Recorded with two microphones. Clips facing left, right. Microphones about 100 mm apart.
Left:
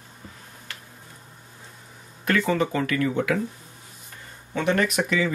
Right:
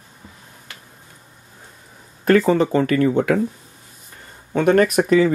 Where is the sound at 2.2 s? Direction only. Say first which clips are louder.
Right 8 dB; 35° right (ahead or behind).